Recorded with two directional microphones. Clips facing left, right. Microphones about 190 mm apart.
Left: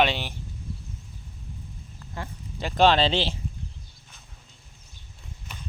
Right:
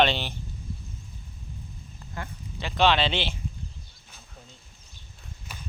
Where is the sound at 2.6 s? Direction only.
45° left (ahead or behind).